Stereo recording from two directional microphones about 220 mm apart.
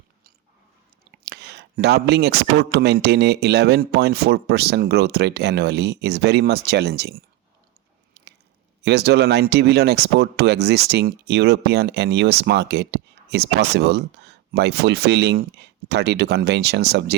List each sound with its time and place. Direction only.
1.1 s speech: 50° right (ahead or behind)
8.2 s squish: 50° right (ahead or behind)
8.8 s speech: 50° right (ahead or behind)